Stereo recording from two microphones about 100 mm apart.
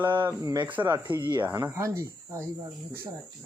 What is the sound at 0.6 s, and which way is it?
Speech, 15° right (ahead or behind).